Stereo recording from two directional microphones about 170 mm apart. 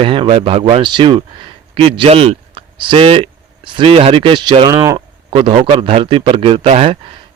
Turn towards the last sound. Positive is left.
turn(degrees=-35)  # may be behind; listen again after turning